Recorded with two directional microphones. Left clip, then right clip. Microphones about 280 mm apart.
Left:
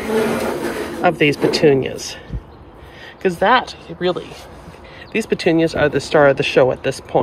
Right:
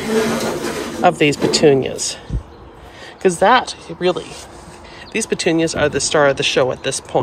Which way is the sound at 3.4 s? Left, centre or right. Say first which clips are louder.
Right 1 dB; centre.